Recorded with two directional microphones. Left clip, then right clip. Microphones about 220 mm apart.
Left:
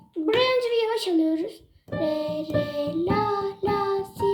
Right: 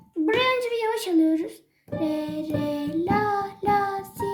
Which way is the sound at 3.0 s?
55° right (ahead or behind).